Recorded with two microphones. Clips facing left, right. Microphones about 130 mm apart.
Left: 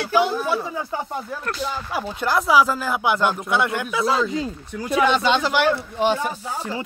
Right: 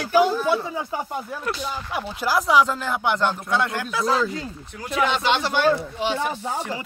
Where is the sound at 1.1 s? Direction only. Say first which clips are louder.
Even; 5° right (ahead or behind).